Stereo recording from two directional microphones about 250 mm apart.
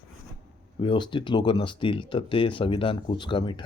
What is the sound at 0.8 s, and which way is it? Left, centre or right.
Speech, centre.